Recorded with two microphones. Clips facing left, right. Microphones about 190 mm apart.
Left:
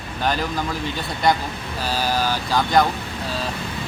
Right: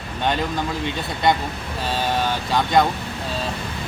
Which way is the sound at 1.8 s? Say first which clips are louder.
Even; 25° right (ahead or behind).